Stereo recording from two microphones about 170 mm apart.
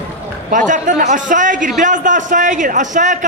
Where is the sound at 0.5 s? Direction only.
50° right (ahead or behind).